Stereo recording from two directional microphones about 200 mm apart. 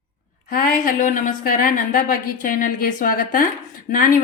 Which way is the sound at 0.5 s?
45° left (ahead or behind).